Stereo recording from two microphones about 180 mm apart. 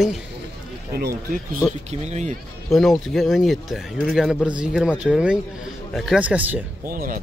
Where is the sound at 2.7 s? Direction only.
Centre (ahead or behind).